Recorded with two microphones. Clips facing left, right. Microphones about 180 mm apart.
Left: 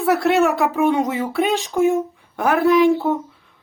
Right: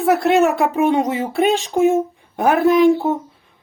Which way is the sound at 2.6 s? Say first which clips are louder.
Right 1 dB; 50° right (ahead or behind).